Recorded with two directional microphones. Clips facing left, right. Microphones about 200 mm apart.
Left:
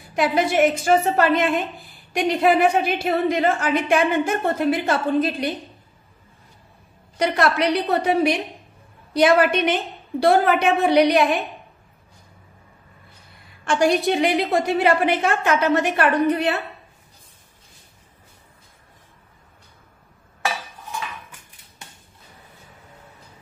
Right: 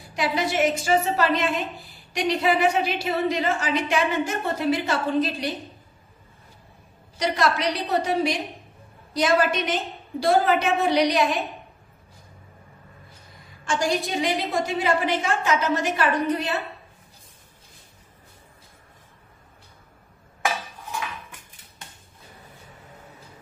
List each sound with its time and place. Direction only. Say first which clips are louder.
0.1 s a woman's voice: left 5 dB; 55° left (ahead or behind)
7.2 s a woman's voice: left 4 dB; 60° left (ahead or behind)
13.7 s a woman's voice: left 6 dB; 60° left (ahead or behind)